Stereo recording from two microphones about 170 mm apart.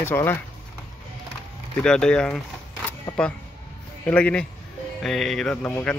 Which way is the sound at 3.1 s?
25° left (ahead or behind).